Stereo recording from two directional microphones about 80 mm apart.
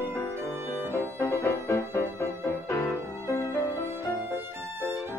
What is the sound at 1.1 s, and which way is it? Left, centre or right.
Music, left.